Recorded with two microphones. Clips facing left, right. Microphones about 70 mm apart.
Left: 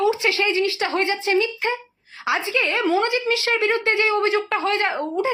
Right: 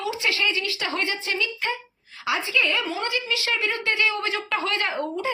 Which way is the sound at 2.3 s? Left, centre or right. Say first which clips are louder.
Left 2 dB; left.